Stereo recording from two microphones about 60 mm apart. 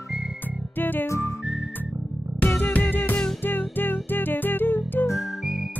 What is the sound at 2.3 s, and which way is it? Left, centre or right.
Music, left.